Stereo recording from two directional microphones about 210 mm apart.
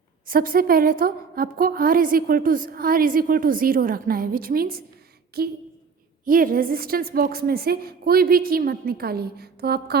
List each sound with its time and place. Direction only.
0.3 s a woman's voice: 45° right (ahead or behind)